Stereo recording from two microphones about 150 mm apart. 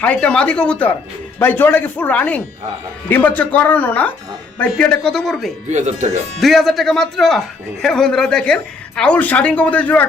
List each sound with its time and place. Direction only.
0.0 s a man's voice: 10° left (ahead or behind)
5.6 s speech: 50° right (ahead or behind)
6.4 s a man's voice: centre (ahead or behind)